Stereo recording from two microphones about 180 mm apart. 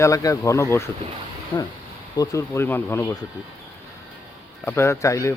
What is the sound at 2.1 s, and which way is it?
Speech, 15° left (ahead or behind).